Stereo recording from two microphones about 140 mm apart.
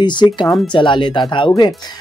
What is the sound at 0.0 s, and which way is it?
Speech, 35° left (ahead or behind).